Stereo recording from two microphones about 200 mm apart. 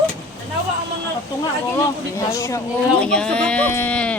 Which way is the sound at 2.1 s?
15° left (ahead or behind).